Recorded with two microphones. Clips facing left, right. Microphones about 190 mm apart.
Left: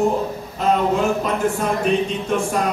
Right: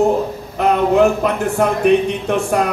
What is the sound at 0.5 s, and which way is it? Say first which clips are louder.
A woman's voice: right 5 dB; 65° right (ahead or behind).